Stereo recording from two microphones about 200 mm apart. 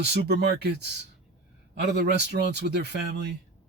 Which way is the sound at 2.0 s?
55° right (ahead or behind).